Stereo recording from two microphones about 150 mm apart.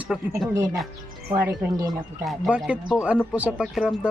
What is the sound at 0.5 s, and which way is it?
A man's voice, 20° right (ahead or behind).